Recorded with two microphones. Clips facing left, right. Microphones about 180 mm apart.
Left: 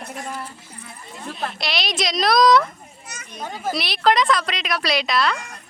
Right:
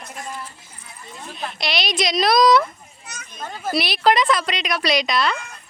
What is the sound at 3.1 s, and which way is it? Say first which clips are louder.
Speech: left 1 dB; 15° left (ahead or behind).